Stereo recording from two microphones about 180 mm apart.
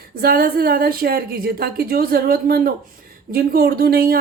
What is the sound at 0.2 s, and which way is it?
A woman's voice, 60° right (ahead or behind).